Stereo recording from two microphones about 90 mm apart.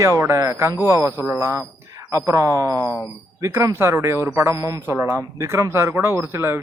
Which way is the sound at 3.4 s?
35° right (ahead or behind).